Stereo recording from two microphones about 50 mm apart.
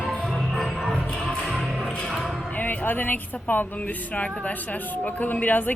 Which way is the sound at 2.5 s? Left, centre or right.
Left.